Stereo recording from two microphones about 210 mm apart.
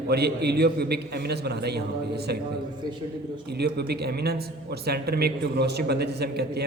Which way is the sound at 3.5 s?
50° right (ahead or behind).